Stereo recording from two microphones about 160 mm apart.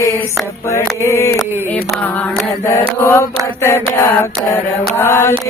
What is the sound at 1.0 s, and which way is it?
Mantra, 15° left (ahead or behind).